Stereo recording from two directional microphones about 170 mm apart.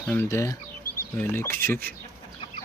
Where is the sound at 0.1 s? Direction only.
15° left (ahead or behind).